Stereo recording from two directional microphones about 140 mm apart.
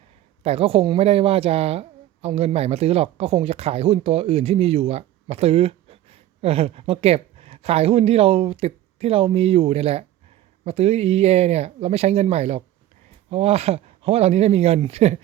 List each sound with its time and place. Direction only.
0.4 s a woman's voice: 45° right (ahead or behind)